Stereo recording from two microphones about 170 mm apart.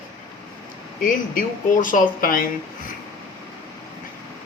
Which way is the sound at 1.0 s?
50° left (ahead or behind).